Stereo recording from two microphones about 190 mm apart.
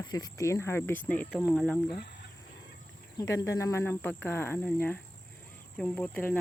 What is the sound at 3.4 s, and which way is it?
Speech, 15° left (ahead or behind).